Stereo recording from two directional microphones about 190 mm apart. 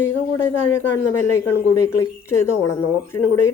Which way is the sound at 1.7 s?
15° left (ahead or behind).